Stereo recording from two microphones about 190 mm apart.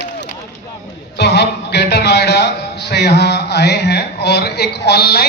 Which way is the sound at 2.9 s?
60° left (ahead or behind).